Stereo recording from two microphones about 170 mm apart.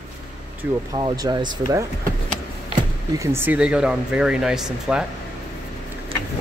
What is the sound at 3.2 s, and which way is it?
Speech, 15° right (ahead or behind).